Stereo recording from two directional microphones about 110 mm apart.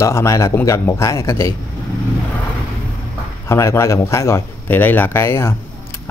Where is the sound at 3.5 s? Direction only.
25° left (ahead or behind).